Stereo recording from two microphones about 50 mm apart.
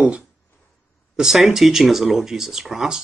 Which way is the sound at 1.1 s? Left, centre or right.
Centre.